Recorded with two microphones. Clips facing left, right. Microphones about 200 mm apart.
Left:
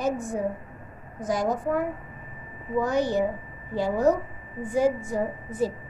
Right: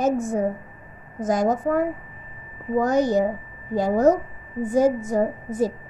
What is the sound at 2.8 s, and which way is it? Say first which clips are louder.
A woman's voice: right 4 dB; 45° right (ahead or behind).